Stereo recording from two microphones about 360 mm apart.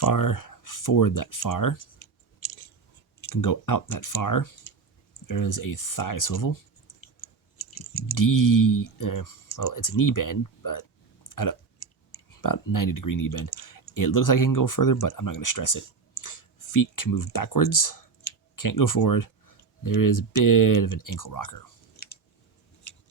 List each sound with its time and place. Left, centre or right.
0.0 s speech: left
2.4 s chewing: left
3.2 s speech: left
7.7 s speech: left